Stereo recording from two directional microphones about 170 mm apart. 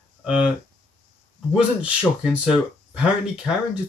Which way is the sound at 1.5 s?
5° right (ahead or behind).